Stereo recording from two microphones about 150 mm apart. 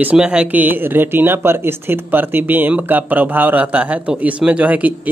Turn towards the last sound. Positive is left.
turn(degrees=-10)  # may be behind; listen again after turning